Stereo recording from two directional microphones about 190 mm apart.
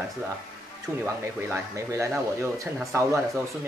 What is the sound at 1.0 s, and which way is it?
Speech, 15° right (ahead or behind).